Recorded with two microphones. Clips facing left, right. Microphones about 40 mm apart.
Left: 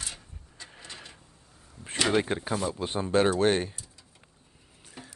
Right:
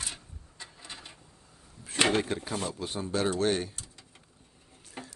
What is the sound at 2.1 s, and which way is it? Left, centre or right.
Speech, left.